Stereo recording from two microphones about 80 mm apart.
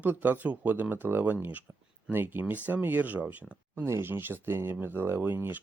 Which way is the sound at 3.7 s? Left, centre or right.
Right.